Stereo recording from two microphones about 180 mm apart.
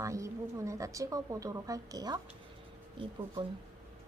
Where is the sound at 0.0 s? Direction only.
15° right (ahead or behind).